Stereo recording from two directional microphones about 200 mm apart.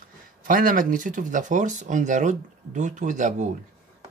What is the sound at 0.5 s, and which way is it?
Speech, 40° right (ahead or behind).